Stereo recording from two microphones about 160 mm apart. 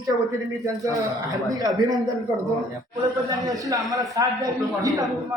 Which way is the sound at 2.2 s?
20° right (ahead or behind).